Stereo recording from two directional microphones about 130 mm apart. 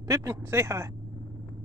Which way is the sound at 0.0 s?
20° right (ahead or behind).